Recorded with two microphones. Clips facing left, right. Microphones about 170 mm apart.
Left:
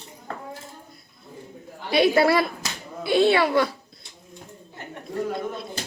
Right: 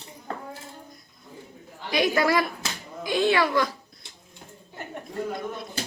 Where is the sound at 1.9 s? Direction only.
30° left (ahead or behind).